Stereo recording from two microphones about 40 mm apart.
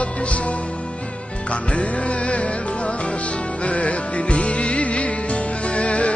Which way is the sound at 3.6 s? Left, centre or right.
Left.